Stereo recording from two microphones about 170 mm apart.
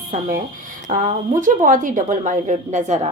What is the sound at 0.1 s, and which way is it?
Speech, 50° right (ahead or behind).